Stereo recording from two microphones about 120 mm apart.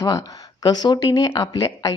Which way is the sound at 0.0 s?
30° left (ahead or behind).